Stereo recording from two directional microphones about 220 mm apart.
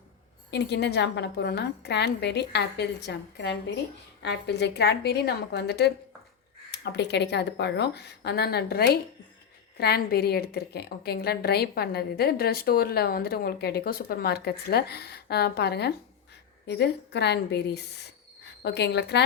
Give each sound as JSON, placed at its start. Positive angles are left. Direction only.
{"t": 0.5, "sound": "a woman's voice", "side_deg": 50}